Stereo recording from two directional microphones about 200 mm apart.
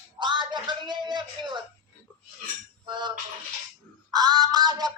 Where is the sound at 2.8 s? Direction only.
20° right (ahead or behind).